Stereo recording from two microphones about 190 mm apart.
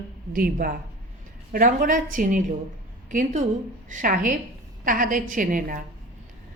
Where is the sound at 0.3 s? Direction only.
50° right (ahead or behind).